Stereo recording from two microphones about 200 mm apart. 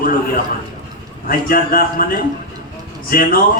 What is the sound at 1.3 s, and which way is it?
A man's voice, 45° left (ahead or behind).